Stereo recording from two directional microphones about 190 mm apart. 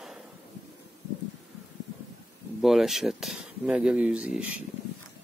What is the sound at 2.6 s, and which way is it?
Speech, centre (ahead or behind).